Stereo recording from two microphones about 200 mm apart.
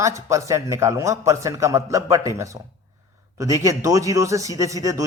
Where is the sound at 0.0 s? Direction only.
15° right (ahead or behind).